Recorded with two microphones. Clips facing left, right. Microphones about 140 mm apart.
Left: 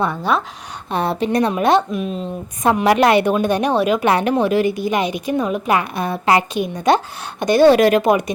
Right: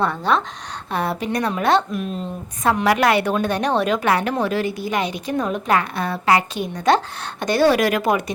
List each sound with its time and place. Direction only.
0.0 s a woman's voice: 10° left (ahead or behind)
0.9 s a woman's voice: 25° left (ahead or behind)
1.9 s a woman's voice: centre (ahead or behind)
2.6 s a woman's voice: 20° left (ahead or behind)
4.0 s a woman's voice: 20° left (ahead or behind)